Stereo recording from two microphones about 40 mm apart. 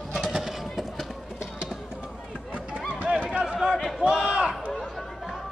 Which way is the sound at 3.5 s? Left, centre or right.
Centre.